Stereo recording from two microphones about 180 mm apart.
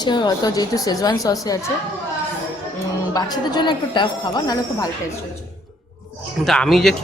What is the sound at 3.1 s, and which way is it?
A woman's voice, 20° left (ahead or behind).